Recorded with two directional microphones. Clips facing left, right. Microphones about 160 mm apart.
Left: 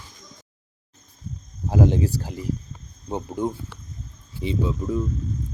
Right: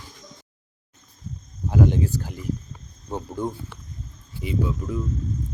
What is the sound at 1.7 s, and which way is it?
Speech, 30° left (ahead or behind).